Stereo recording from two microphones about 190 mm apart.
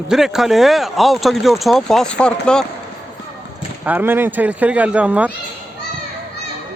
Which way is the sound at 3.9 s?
10° right (ahead or behind).